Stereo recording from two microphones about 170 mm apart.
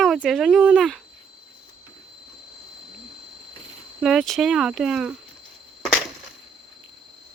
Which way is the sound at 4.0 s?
Centre (ahead or behind).